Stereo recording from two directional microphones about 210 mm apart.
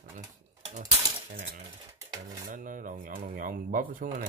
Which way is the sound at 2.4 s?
40° right (ahead or behind).